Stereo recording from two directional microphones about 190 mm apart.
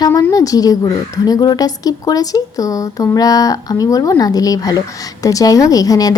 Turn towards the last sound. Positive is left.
turn(degrees=20)  # may be behind; listen again after turning